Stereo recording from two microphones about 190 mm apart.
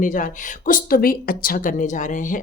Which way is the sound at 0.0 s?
45° left (ahead or behind).